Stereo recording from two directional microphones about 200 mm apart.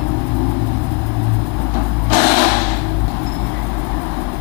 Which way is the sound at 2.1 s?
15° left (ahead or behind).